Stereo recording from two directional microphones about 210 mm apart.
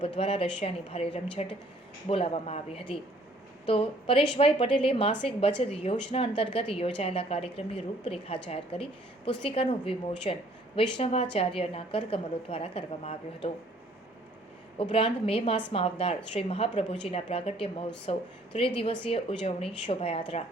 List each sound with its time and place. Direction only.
0.2 s a woman's voice: 25° left (ahead or behind)
14.8 s a woman's voice: 25° left (ahead or behind)